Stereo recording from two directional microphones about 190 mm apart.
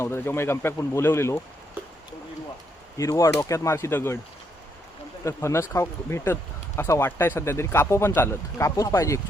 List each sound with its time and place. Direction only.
0.0 s speech: 15° left (ahead or behind)
3.0 s speech: 15° left (ahead or behind)
5.2 s speech: 15° left (ahead or behind)